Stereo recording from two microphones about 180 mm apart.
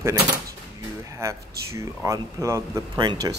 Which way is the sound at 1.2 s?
15° right (ahead or behind).